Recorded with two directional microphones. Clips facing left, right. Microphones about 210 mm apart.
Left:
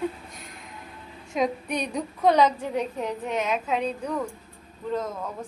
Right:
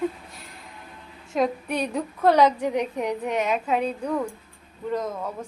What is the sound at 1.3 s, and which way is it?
A woman's voice, 5° right (ahead or behind).